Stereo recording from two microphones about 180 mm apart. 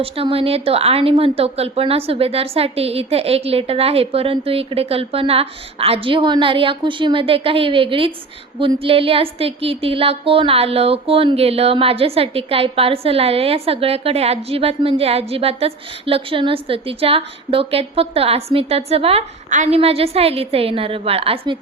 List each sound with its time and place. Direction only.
0.0 s speech: 30° right (ahead or behind)